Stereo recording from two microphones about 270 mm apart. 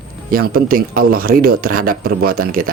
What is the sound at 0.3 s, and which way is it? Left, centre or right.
Speech, right.